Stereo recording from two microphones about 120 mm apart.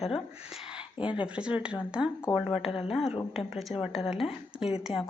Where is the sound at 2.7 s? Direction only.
55° left (ahead or behind).